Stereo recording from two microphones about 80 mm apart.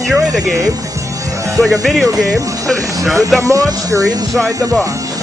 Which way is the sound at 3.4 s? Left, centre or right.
Right.